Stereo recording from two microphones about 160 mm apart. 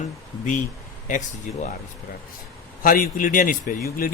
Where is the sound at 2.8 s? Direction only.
60° left (ahead or behind).